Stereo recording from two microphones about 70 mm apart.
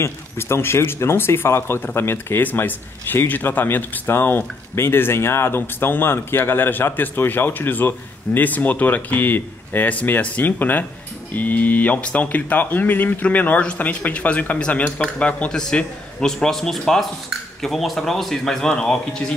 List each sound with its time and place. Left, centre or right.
0.0 s a man's voice: left; by 19.3 s centre